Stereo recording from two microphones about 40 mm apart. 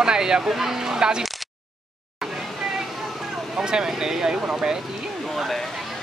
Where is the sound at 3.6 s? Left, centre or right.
Centre.